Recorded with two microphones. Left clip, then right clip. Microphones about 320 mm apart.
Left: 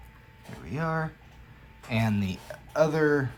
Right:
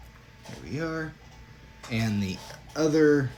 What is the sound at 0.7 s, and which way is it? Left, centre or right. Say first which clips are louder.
Speech: left 2 dB; centre.